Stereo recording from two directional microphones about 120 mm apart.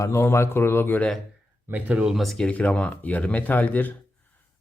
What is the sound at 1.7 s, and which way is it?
Speech, 10° right (ahead or behind).